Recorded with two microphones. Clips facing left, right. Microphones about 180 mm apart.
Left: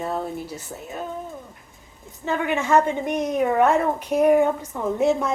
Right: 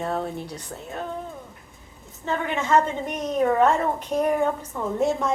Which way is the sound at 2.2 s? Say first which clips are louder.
Left 3 dB; 10° left (ahead or behind).